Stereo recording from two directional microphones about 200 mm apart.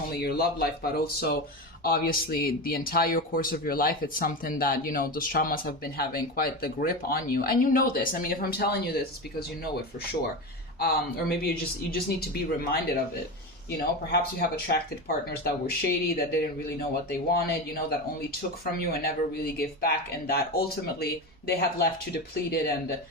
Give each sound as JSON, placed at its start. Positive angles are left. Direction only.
{"t": 0.2, "sound": "speech", "side_deg": 50}
{"t": 10.8, "sound": "speech", "side_deg": 50}